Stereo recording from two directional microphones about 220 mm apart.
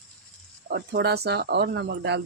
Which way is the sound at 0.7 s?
45° right (ahead or behind).